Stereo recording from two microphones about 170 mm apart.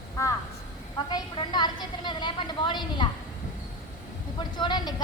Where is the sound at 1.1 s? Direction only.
25° left (ahead or behind).